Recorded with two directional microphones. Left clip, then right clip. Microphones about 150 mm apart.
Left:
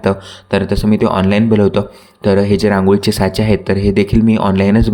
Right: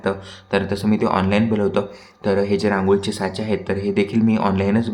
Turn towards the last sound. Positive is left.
turn(degrees=45)  # may be behind; listen again after turning